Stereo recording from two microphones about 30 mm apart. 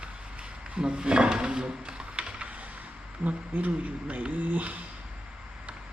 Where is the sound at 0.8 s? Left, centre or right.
Right.